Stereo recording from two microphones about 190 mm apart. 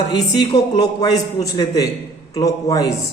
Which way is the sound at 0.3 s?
20° left (ahead or behind).